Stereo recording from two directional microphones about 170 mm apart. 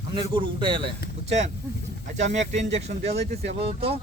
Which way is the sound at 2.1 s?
40° right (ahead or behind).